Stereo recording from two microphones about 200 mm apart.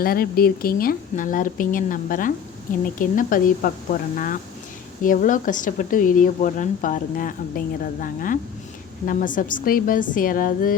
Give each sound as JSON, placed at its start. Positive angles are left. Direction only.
{"t": 0.0, "sound": "a woman's voice", "side_deg": 45}